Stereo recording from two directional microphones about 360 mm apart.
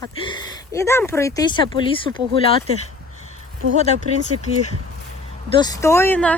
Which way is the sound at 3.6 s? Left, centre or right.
Right.